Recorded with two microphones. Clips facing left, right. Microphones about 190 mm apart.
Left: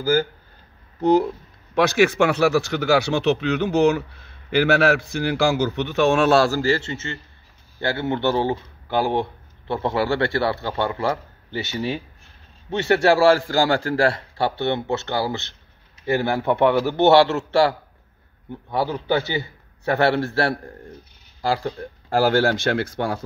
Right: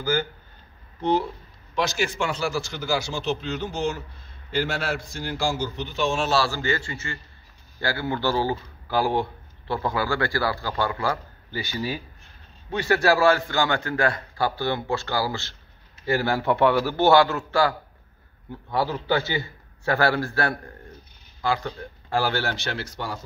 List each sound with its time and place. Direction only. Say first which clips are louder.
1.8 s a man's voice: left 8 dB; 65° left (ahead or behind)
6.6 s a man's voice: left 6 dB; 30° left (ahead or behind)
18.7 s a man's voice: left 2 dB; 15° left (ahead or behind); by 23.2 s 55° left (ahead or behind)